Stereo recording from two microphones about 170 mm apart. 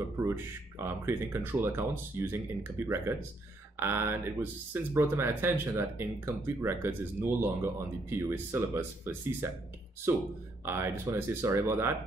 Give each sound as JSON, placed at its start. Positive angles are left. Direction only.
{"t": 0.2, "sound": "speech", "side_deg": -15}
{"t": 10.6, "sound": "speech", "side_deg": -15}